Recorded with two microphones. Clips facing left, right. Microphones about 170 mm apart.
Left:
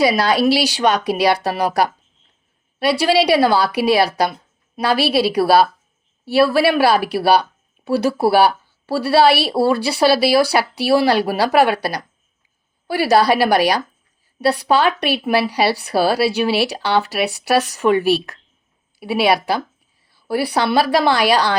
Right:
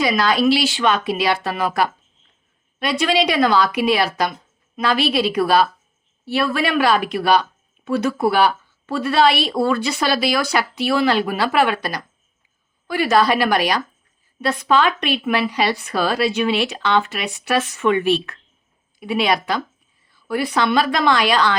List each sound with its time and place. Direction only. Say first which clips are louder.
0.0 s a woman's voice: left 2 dB; 35° left (ahead or behind)
14.4 s speech: left 2 dB; 35° left (ahead or behind)
18.9 s a woman's voice: left 1 dB; 5° left (ahead or behind)
20.1 s speech: left 2 dB; 35° left (ahead or behind)